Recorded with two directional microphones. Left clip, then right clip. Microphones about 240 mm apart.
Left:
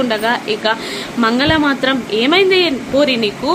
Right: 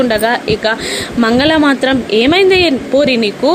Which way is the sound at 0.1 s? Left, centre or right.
Centre.